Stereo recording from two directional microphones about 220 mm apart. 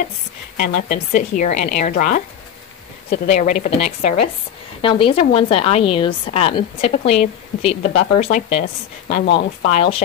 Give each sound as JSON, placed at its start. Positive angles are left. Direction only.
{"t": 0.6, "sound": "a woman's voice", "side_deg": 40}
{"t": 9.2, "sound": "speech", "side_deg": 45}
{"t": 9.7, "sound": "a woman's voice", "side_deg": 25}